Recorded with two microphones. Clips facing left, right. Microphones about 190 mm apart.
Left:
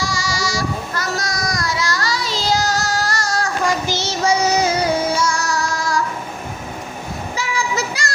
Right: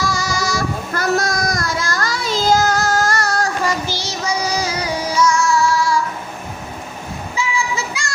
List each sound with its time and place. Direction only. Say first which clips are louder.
0.0 s child singing: right 2 dB; 55° right (ahead or behind)
3.8 s child singing: left 4 dB; 25° left (ahead or behind); by 6.0 s 40° left (ahead or behind)
7.3 s child singing: right 1 dB; 40° left (ahead or behind)